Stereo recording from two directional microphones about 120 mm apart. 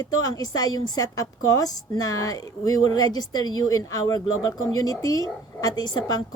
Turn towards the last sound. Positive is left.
turn(degrees=35)  # may be behind; listen again after turning